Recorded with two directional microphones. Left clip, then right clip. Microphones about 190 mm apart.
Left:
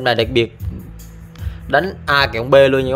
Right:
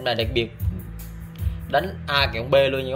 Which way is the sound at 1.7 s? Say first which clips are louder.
Left 7 dB; 45° left (ahead or behind).